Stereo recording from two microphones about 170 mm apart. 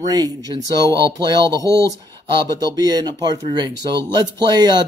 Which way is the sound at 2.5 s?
20° right (ahead or behind).